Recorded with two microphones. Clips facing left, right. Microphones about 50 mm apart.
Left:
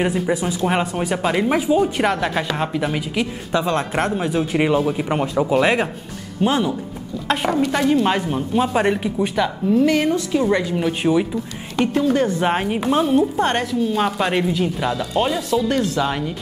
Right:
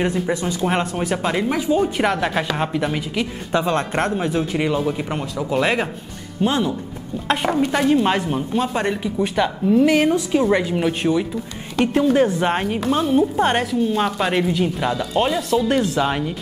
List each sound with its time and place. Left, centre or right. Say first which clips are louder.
0.0 s a woman's voice: left 1 dB; centre
5.2 s speech: left 6 dB; left
5.5 s a woman's voice: even; centre
9.3 s a woman's voice: right 2 dB; centre
11.0 s speech: left 5 dB; centre
11.8 s a woman's voice: right 2 dB; centre
12.4 s a woman's voice: left 1 dB; centre